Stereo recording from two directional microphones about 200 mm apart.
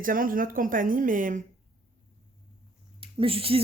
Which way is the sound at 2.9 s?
25° right (ahead or behind).